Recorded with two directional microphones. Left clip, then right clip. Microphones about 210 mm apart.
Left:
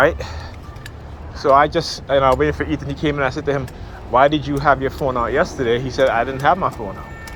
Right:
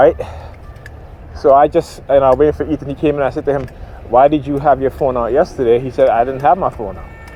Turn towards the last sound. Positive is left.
turn(degrees=-40)  # may be behind; listen again after turning